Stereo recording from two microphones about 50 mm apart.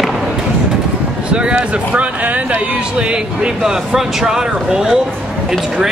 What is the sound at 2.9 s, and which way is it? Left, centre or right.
Speech, centre.